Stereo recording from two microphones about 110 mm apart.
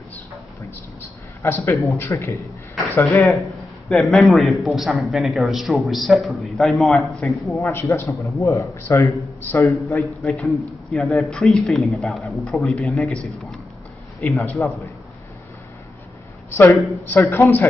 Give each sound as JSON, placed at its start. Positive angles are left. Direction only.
{"t": 1.4, "sound": "a woman's voice", "side_deg": 25}
{"t": 3.3, "sound": "a man's voice", "side_deg": 0}
{"t": 7.5, "sound": "a woman's voice", "side_deg": 25}
{"t": 10.2, "sound": "a man's voice", "side_deg": 0}
{"t": 14.3, "sound": "a man's voice", "side_deg": 15}
{"t": 16.5, "sound": "a woman's voice", "side_deg": 20}